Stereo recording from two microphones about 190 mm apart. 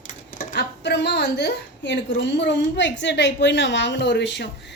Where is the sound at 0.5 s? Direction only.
60° left (ahead or behind).